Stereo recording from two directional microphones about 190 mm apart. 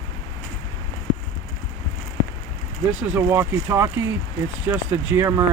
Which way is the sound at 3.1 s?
15° right (ahead or behind).